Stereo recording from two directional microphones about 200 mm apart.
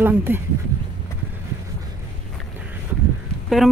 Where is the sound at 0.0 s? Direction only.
10° right (ahead or behind).